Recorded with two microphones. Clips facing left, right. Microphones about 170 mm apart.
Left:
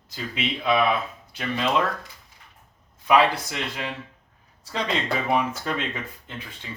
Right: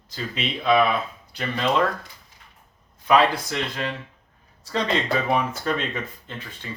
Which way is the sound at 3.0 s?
10° left (ahead or behind).